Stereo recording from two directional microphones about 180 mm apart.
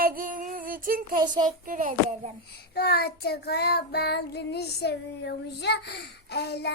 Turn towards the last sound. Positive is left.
turn(degrees=65)  # may be behind; listen again after turning